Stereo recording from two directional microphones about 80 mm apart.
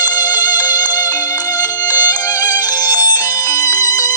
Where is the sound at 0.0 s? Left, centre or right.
Left.